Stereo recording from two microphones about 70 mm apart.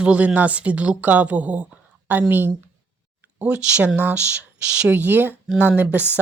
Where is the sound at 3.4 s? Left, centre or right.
Centre.